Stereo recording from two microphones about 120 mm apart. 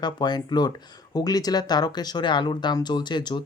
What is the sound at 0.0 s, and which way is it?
Speech, 35° left (ahead or behind).